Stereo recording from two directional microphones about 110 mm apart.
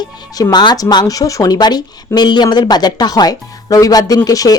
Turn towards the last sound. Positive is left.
turn(degrees=35)  # may be behind; listen again after turning